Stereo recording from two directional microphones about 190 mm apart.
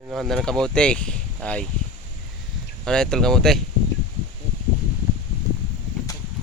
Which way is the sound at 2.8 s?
5° left (ahead or behind).